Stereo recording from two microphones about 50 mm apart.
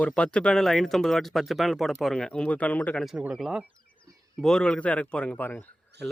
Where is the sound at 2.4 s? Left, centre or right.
Left.